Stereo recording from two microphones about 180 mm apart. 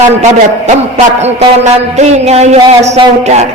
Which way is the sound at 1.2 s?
40° right (ahead or behind).